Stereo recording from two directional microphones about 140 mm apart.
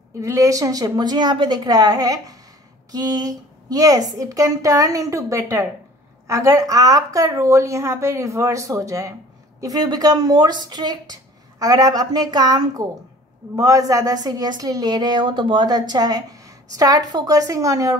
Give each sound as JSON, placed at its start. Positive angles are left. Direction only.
{"t": 0.2, "sound": "a woman's voice", "side_deg": -25}